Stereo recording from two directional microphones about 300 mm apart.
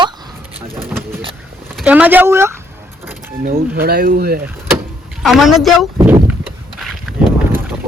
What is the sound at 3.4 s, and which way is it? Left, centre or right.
Speech, right.